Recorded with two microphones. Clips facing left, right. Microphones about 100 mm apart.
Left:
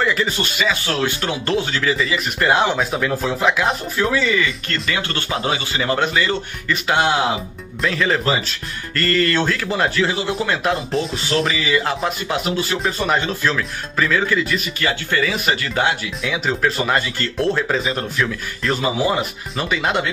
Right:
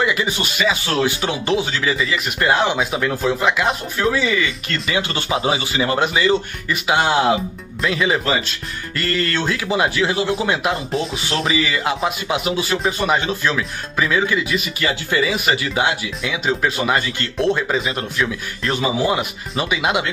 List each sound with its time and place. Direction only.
0.0 s speech: 10° right (ahead or behind)
4.8 s speech: 15° right (ahead or behind)